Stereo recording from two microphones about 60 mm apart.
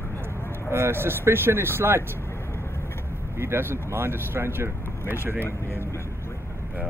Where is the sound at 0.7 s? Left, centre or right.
Right.